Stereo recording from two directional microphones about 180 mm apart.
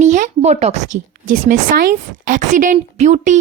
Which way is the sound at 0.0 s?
40° right (ahead or behind).